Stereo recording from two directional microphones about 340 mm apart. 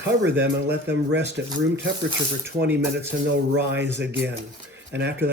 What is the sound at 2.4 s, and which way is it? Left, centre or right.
Speech, centre.